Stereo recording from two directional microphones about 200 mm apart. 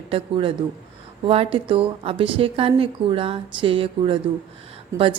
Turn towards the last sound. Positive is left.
turn(degrees=-25)  # may be behind; listen again after turning